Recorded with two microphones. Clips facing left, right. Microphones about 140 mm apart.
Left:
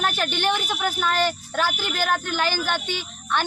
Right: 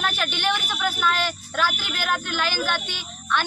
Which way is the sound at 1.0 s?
50° left (ahead or behind).